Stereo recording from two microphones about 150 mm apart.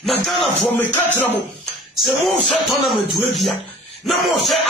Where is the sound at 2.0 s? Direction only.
Centre (ahead or behind).